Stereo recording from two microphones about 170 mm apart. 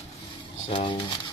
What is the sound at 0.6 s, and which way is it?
Speech, 30° left (ahead or behind).